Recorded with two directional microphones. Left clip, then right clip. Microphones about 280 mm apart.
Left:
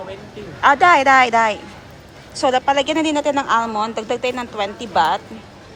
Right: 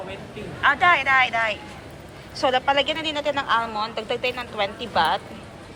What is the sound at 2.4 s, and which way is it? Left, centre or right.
A woman's voice, centre.